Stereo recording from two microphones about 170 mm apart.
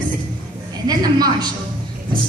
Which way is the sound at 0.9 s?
25° right (ahead or behind).